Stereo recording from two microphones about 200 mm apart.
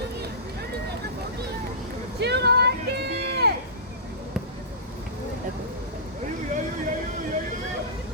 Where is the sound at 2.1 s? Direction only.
55° right (ahead or behind).